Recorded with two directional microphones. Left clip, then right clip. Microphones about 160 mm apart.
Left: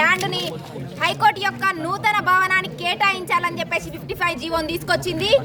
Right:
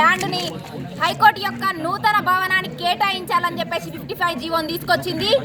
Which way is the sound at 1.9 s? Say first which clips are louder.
Right 2 dB; 35° left (ahead or behind).